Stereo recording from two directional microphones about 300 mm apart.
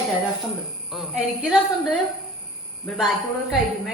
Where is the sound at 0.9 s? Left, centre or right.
Centre.